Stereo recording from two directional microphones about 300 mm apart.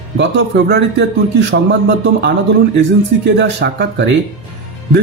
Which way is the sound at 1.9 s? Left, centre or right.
Right.